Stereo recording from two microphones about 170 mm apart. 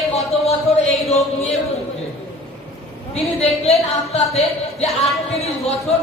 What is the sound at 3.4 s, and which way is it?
Speech, 40° left (ahead or behind).